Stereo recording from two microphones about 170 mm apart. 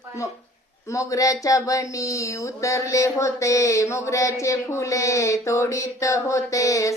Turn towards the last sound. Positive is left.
turn(degrees=20)  # may be behind; listen again after turning